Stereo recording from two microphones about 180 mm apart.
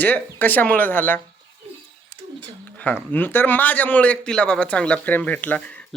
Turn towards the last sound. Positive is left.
turn(degrees=10)  # may be behind; listen again after turning